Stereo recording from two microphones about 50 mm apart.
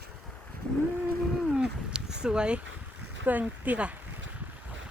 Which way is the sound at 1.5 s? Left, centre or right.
Centre.